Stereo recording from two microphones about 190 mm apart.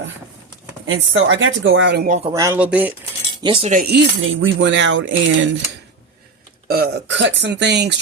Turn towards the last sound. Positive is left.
turn(degrees=-65)  # may be behind; listen again after turning